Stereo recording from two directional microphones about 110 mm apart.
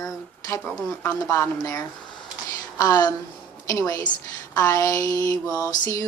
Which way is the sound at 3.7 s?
30° left (ahead or behind).